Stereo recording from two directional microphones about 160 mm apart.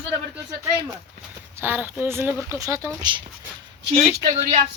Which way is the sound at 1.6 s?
10° right (ahead or behind).